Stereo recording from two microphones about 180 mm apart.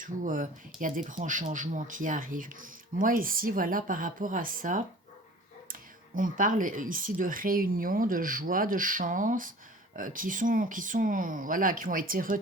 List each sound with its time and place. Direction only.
0.0 s speech: 45° right (ahead or behind)
6.1 s speech: 50° right (ahead or behind)